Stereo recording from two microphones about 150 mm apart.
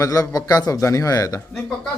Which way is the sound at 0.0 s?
20° left (ahead or behind).